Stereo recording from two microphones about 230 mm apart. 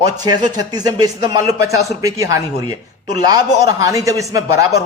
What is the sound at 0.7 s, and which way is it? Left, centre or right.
A man's voice, centre.